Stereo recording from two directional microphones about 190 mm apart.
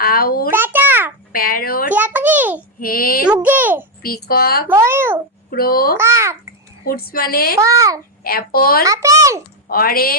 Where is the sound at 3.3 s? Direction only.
10° right (ahead or behind).